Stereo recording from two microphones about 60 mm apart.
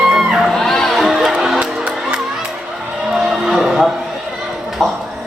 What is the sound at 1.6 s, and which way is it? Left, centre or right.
Music, centre.